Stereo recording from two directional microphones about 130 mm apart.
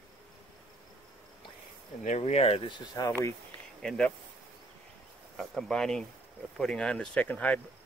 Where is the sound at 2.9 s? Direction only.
25° left (ahead or behind).